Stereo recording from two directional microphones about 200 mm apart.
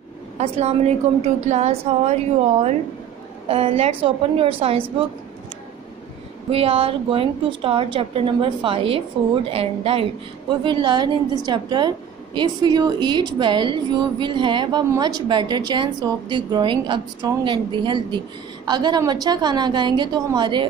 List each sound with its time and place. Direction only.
0.4 s a woman's voice: 35° right (ahead or behind)
3.4 s a woman's voice: 30° right (ahead or behind)
6.5 s a woman's voice: 30° right (ahead or behind)